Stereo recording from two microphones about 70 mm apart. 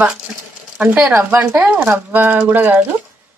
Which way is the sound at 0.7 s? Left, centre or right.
Right.